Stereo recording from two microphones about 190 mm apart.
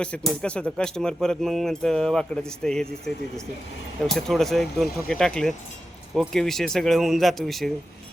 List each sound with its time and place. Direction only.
0.0 s speech: 5° left (ahead or behind)
4.0 s speech: centre (ahead or behind)